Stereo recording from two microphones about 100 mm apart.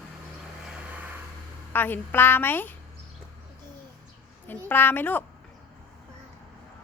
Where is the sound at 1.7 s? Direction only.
20° left (ahead or behind).